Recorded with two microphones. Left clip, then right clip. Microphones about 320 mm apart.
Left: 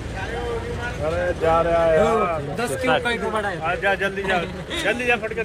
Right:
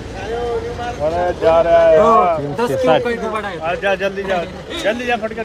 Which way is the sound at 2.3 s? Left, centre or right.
Right.